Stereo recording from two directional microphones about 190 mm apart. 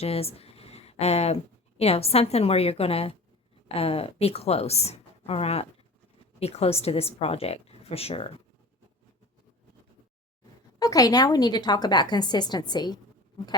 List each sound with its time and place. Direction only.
0.0 s a woman's voice: 30° left (ahead or behind)
10.8 s a woman's voice: 20° left (ahead or behind)